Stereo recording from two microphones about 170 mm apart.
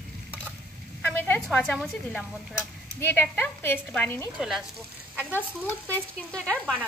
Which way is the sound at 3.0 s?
10° left (ahead or behind).